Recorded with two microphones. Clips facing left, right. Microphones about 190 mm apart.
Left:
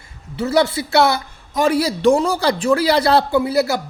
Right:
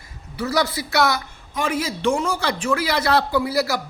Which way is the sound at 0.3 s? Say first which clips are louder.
Left 5 dB; 25° left (ahead or behind).